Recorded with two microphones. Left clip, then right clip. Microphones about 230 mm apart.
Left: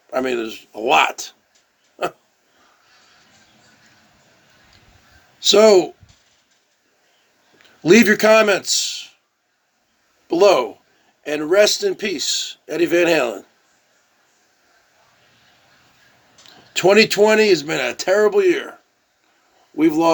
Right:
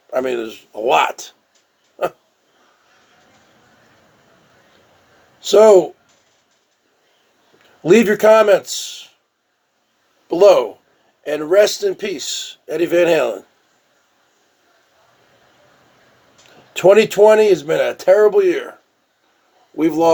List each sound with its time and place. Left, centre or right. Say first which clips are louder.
0.1 s a man's voice: right 1 dB; left
5.4 s a man's voice: right 2 dB; left
7.9 s a man's voice: right 1 dB; left
10.2 s a man's voice: right 3 dB; left
16.7 s a man's voice: right 2 dB; left